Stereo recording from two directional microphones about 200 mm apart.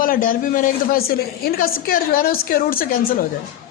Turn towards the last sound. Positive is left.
turn(degrees=45)  # may be behind; listen again after turning